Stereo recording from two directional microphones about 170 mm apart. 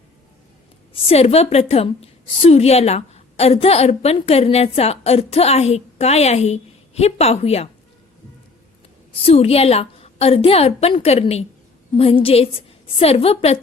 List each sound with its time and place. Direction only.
0.9 s a woman's voice: 35° left (ahead or behind)
9.1 s a woman's voice: 35° left (ahead or behind)